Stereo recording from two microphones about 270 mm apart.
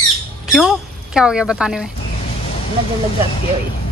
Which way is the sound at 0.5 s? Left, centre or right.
Centre.